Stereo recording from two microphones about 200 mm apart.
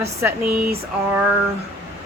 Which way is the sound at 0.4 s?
45° right (ahead or behind).